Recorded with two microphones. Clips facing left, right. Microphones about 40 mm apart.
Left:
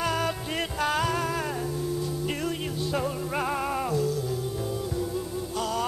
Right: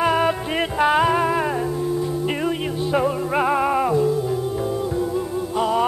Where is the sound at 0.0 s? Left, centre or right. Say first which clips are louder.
Right 9 dB; right.